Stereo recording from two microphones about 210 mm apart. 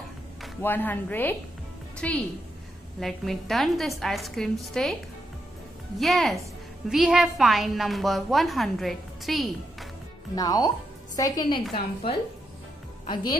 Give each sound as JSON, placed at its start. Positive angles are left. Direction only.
{"t": 0.6, "sound": "a woman's voice", "side_deg": 10}
{"t": 5.9, "sound": "a woman's voice", "side_deg": 0}
{"t": 10.3, "sound": "a woman's voice", "side_deg": 15}